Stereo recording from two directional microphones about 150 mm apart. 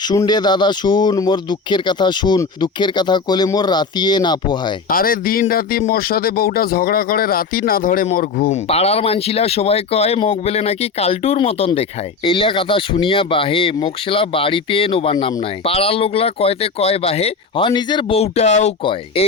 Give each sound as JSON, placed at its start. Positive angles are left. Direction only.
{"t": 0.0, "sound": "speech", "side_deg": 25}
{"t": 4.9, "sound": "speech", "side_deg": 75}
{"t": 8.5, "sound": "speech", "side_deg": 45}
{"t": 18.8, "sound": "speech", "side_deg": 35}